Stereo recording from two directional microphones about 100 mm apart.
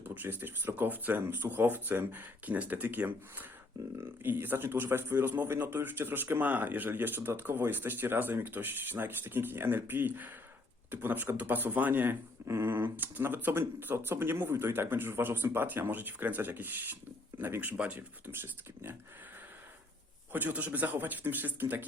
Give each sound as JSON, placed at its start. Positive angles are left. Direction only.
{"t": 0.2, "sound": "speech", "side_deg": -20}
{"t": 20.3, "sound": "speech", "side_deg": -15}